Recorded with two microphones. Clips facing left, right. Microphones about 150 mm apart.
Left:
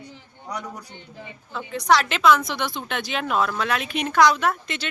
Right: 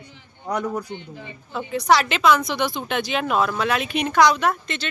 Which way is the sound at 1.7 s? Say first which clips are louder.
Right 1 dB; 5° right (ahead or behind).